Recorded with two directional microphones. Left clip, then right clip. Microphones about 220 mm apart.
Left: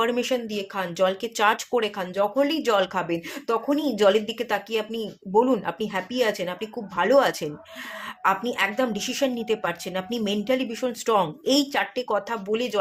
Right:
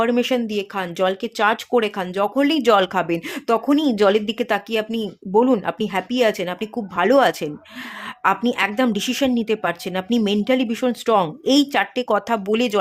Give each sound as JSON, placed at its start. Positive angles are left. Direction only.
{"t": 0.0, "sound": "a woman's voice", "side_deg": -25}